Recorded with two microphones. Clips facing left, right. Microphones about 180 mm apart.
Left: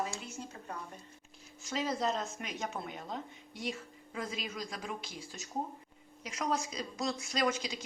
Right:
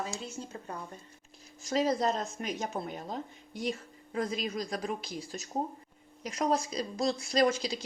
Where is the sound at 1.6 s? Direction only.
40° right (ahead or behind).